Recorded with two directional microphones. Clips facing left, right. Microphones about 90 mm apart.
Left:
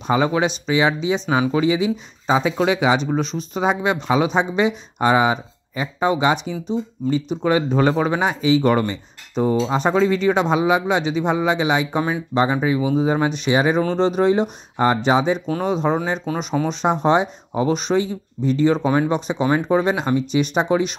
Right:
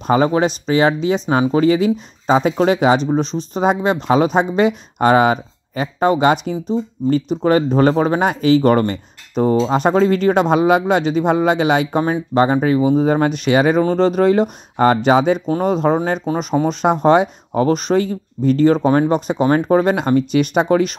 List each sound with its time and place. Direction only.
0.0 s speech: 45° right (ahead or behind); by 12.0 s 60° right (ahead or behind)
12.0 s speech: 45° right (ahead or behind)
13.8 s speech: 45° right (ahead or behind); by 15.3 s 60° right (ahead or behind)
15.4 s speech: 40° right (ahead or behind)